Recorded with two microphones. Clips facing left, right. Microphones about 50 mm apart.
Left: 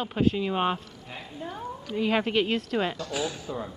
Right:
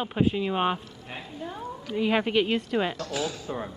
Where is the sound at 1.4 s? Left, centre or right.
Centre.